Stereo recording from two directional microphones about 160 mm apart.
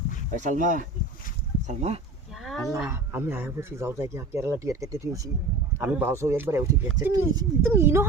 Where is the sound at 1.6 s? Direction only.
40° right (ahead or behind).